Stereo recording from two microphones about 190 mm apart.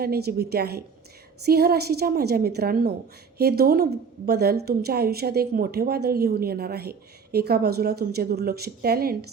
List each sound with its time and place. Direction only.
0.0 s a woman's voice: 55° right (ahead or behind)